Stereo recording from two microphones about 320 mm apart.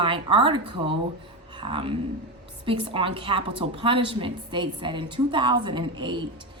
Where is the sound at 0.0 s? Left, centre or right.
Centre.